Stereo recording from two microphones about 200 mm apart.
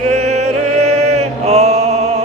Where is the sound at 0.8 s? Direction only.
35° right (ahead or behind).